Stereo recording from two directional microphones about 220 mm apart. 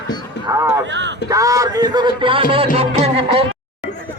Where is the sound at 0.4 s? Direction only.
15° right (ahead or behind).